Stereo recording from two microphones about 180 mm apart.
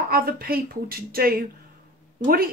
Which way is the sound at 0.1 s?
55° right (ahead or behind).